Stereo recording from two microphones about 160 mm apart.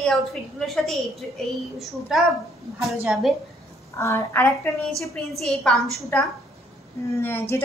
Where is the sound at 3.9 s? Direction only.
15° left (ahead or behind).